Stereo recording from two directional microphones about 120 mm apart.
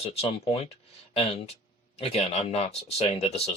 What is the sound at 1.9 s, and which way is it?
Speech, 55° left (ahead or behind).